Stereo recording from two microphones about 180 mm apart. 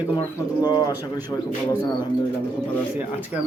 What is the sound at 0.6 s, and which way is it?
Speech, 20° left (ahead or behind).